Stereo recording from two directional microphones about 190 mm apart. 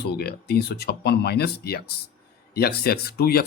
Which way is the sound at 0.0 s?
55° left (ahead or behind).